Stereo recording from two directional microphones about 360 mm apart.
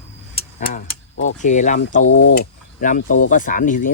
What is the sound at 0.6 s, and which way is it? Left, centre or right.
Speech, left.